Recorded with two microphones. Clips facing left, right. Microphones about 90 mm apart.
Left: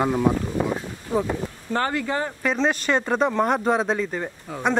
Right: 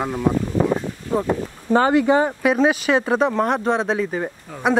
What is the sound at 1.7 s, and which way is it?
Speech, 15° right (ahead or behind).